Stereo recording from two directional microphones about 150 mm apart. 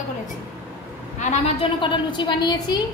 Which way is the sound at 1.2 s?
50° left (ahead or behind).